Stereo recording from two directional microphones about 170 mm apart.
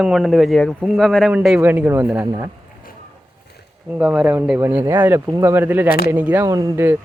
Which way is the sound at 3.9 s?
5° right (ahead or behind).